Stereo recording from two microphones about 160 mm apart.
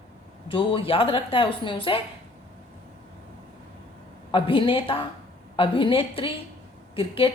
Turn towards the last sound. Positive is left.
turn(degrees=35)  # may be behind; listen again after turning